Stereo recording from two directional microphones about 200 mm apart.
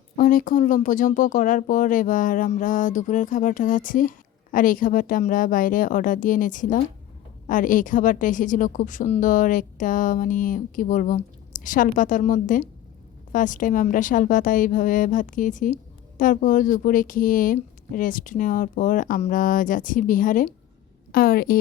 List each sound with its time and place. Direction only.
0.2 s a woman's voice: 45° left (ahead or behind)